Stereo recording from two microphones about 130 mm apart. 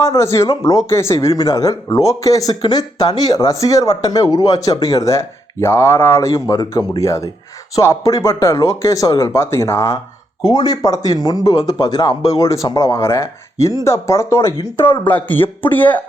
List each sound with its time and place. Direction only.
0.0 s speech: 20° left (ahead or behind)